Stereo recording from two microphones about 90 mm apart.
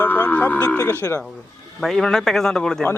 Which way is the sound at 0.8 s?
35° left (ahead or behind).